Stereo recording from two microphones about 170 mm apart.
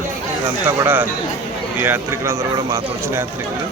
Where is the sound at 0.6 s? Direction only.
10° right (ahead or behind).